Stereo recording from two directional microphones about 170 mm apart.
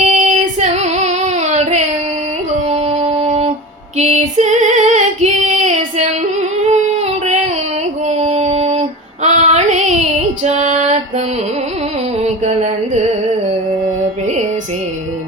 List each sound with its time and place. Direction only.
0.0 s female singing: 45° right (ahead or behind)
2.6 s music: 40° right (ahead or behind)
3.9 s female singing: 40° right (ahead or behind)
7.3 s a sound: 40° right (ahead or behind)
8.0 s female singing: 40° right (ahead or behind)
12.2 s a sound: 45° right (ahead or behind)
13.8 s music: 45° right (ahead or behind)